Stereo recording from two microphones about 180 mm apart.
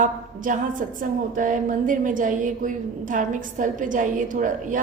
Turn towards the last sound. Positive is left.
turn(degrees=-45)  # may be behind; listen again after turning